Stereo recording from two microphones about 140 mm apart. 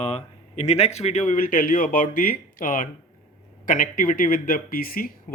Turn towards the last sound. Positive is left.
turn(degrees=90)